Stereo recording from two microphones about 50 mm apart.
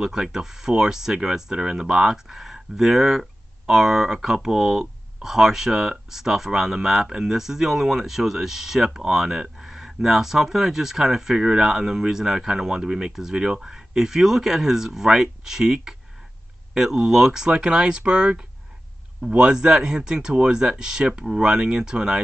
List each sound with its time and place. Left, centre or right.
0.0 s speech: centre